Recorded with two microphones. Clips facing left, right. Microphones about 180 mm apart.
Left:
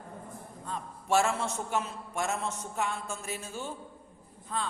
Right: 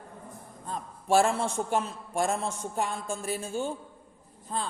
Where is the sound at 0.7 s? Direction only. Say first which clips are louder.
Right 3 dB; 35° right (ahead or behind).